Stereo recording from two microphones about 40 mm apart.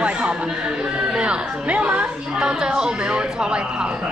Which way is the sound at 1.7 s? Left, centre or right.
Right.